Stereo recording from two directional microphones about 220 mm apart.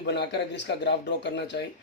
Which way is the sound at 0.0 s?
50° left (ahead or behind).